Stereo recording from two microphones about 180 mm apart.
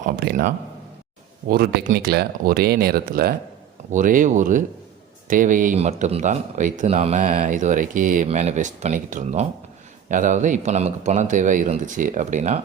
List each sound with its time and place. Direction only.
0.0 s speech: 50° right (ahead or behind)